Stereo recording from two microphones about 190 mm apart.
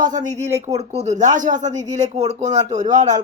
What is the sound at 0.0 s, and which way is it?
Speech, 40° right (ahead or behind).